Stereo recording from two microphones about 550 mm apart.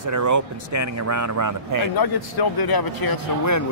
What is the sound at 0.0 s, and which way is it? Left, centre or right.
A man's voice, right.